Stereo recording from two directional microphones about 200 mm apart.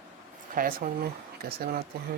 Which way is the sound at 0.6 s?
45° right (ahead or behind).